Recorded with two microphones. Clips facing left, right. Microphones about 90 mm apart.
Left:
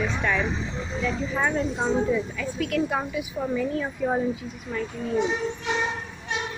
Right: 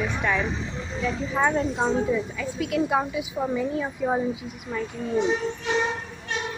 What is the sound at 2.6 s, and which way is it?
A woman's voice, 20° right (ahead or behind).